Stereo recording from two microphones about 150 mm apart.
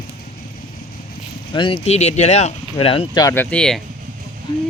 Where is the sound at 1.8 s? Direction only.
45° left (ahead or behind).